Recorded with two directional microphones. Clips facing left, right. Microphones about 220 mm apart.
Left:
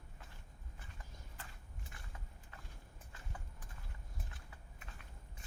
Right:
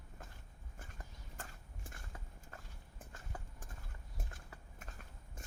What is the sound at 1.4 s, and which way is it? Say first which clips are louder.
Walk: right 5 dB; 45° right (ahead or behind).